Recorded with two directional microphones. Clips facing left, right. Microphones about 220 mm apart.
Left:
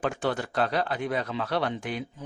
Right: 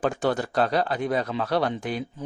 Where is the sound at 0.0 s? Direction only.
40° right (ahead or behind).